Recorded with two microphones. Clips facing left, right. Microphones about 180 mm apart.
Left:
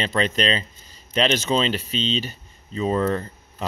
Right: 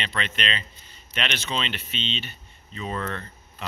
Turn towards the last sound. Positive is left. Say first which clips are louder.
# left 7 dB
turn(degrees=35)  # may be behind; listen again after turning